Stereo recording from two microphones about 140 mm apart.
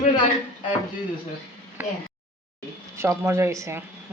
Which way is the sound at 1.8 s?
15° right (ahead or behind).